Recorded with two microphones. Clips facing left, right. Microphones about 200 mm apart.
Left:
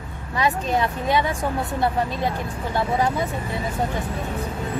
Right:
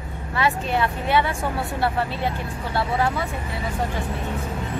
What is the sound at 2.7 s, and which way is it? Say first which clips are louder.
Speech: left 1 dB; 15° left (ahead or behind).